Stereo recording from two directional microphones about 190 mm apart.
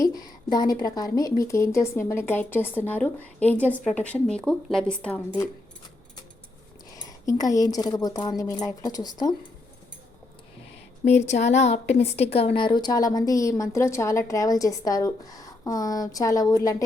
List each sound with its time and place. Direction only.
0.0 s speech: 20° left (ahead or behind)
6.9 s a woman's voice: 20° left (ahead or behind)
11.0 s a woman's voice: 35° left (ahead or behind); by 16.7 s 20° left (ahead or behind)